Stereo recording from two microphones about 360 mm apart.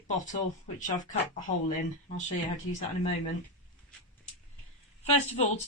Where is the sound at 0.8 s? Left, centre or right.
Left.